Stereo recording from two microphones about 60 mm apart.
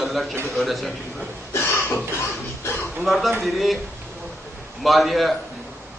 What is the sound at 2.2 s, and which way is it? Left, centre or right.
Music, left.